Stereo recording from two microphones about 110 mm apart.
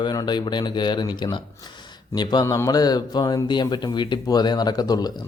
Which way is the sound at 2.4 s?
30° left (ahead or behind).